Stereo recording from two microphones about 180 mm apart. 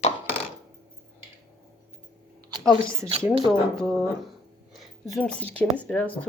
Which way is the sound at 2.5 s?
20° right (ahead or behind).